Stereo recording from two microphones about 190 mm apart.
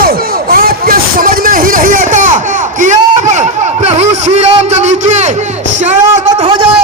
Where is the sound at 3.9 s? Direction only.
35° right (ahead or behind).